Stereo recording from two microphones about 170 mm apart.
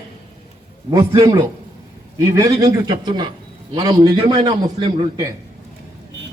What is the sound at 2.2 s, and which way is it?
A man's voice, 20° right (ahead or behind).